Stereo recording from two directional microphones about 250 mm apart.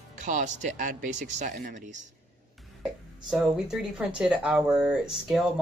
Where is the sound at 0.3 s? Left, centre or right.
Right.